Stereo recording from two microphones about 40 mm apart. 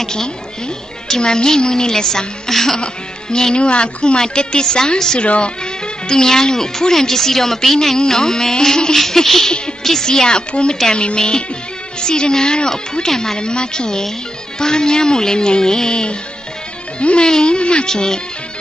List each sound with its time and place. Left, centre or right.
0.0 s a woman's voice: centre
8.9 s speech: centre